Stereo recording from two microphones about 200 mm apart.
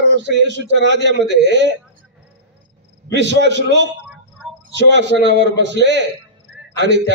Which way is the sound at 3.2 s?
60° right (ahead or behind).